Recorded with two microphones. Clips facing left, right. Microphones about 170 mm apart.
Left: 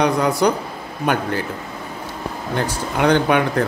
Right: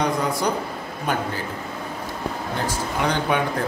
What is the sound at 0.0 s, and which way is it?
Speech, 70° left (ahead or behind).